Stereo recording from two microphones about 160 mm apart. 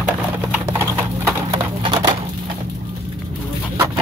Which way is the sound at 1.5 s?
25° right (ahead or behind).